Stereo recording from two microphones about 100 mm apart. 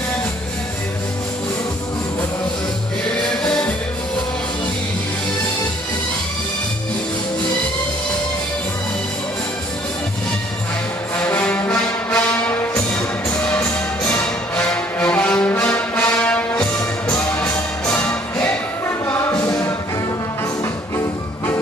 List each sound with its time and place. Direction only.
3.2 s music: 5° left (ahead or behind)
11.2 s music: 15° left (ahead or behind)
14.0 s music: 10° left (ahead or behind)